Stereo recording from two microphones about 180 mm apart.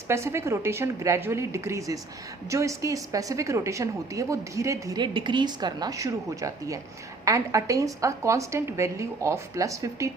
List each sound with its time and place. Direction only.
0.1 s a woman's voice: 15° right (ahead or behind)